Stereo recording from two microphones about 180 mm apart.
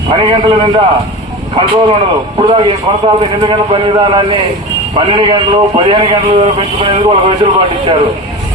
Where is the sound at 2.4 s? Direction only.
30° right (ahead or behind).